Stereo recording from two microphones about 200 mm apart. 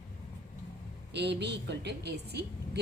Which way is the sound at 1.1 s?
60° right (ahead or behind).